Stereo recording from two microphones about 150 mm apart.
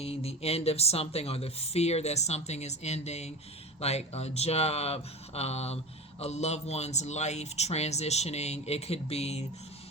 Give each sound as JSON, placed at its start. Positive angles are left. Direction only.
{"t": 0.0, "sound": "speech", "side_deg": 40}